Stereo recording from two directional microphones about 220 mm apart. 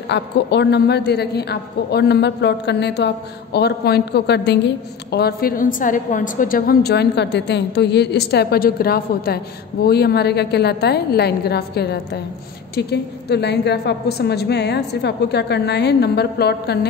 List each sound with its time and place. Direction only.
0.1 s a woman's voice: 50° left (ahead or behind)